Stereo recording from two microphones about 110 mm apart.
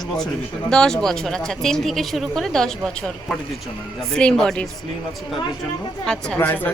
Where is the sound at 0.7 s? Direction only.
5° left (ahead or behind).